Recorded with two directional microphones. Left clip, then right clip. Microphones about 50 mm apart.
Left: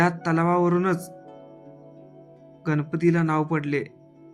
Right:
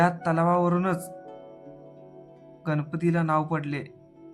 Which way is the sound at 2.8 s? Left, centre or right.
Left.